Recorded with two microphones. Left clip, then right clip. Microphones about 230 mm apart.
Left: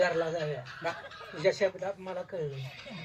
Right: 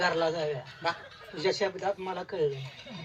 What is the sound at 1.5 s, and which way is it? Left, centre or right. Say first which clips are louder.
Speech: left 2 dB; right.